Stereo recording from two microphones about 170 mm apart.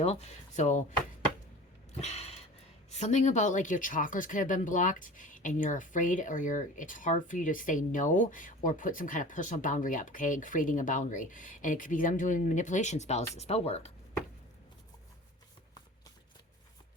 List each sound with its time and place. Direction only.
0.0 s speech: 40° left (ahead or behind)
1.9 s a sound: 40° left (ahead or behind)
2.9 s speech: 40° left (ahead or behind)